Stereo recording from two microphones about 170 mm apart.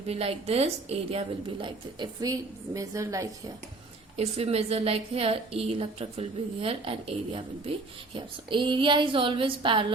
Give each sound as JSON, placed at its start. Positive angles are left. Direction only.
{"t": 0.1, "sound": "a woman's voice", "side_deg": -35}
{"t": 4.2, "sound": "a woman's voice", "side_deg": -35}